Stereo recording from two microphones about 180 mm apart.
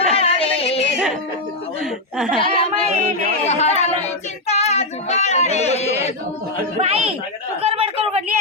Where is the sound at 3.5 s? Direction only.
35° left (ahead or behind).